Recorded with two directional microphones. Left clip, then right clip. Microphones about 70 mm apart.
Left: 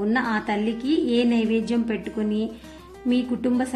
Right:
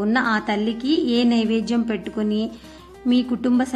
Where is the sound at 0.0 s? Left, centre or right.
Right.